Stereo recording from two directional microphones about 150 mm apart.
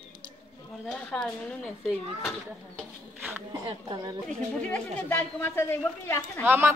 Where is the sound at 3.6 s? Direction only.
30° right (ahead or behind).